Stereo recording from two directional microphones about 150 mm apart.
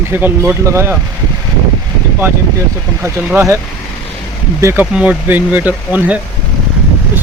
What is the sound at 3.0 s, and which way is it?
Speech, 15° right (ahead or behind).